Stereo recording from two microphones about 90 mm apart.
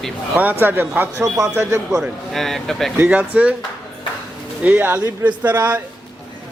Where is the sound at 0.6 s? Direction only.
25° right (ahead or behind).